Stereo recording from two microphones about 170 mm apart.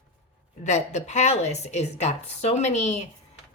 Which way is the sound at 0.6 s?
45° left (ahead or behind).